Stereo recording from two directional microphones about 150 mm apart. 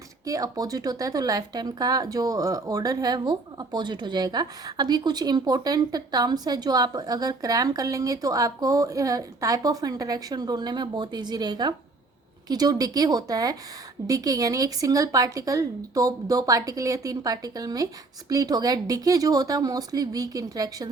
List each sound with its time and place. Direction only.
0.3 s a woman's voice: 25° right (ahead or behind)